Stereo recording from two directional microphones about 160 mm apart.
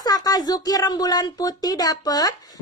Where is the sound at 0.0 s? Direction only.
25° left (ahead or behind).